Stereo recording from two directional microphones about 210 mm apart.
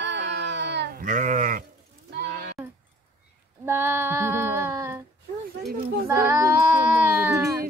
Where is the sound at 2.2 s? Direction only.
45° right (ahead or behind).